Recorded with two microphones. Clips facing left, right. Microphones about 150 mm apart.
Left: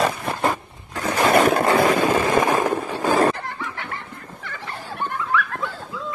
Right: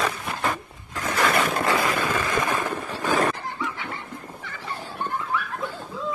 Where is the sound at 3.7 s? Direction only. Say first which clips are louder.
Left 2 dB; 65° left (ahead or behind).